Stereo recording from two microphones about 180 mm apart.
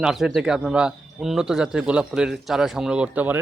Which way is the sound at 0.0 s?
Centre (ahead or behind).